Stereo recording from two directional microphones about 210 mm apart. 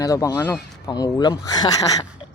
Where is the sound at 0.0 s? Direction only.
15° left (ahead or behind).